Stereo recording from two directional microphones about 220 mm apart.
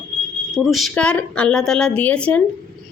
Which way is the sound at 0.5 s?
Centre (ahead or behind).